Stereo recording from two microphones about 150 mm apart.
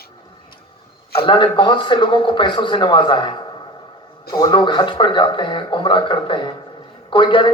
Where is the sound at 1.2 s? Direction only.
35° left (ahead or behind).